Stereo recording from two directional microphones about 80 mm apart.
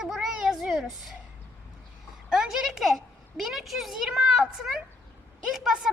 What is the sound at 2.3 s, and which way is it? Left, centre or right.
A child's voice, centre.